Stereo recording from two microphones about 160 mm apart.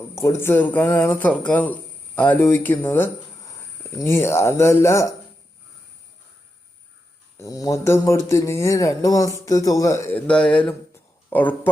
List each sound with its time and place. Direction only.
0.2 s speech: 15° left (ahead or behind)
7.3 s speech: 20° left (ahead or behind)